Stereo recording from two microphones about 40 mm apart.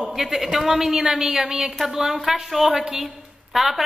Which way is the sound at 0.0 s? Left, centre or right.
Centre.